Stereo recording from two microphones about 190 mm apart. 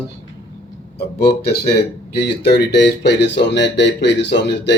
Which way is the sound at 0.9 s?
60° left (ahead or behind).